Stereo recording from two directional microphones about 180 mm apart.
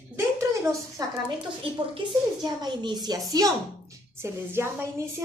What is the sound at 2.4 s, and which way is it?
A woman's voice, 25° right (ahead or behind).